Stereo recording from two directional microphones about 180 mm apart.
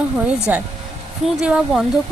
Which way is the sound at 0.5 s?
10° right (ahead or behind).